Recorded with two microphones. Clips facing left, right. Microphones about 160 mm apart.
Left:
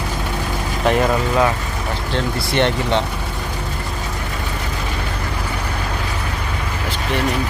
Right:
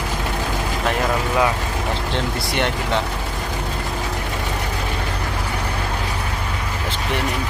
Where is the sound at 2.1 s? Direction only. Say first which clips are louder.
Left 7 dB; 15° right (ahead or behind).